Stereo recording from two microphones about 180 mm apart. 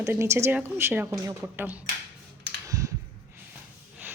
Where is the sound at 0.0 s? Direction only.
15° right (ahead or behind).